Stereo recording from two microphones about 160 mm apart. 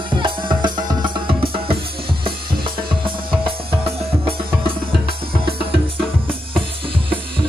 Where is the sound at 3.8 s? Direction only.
35° right (ahead or behind).